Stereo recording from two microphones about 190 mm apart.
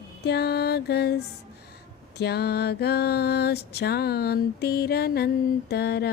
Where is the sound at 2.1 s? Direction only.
60° left (ahead or behind).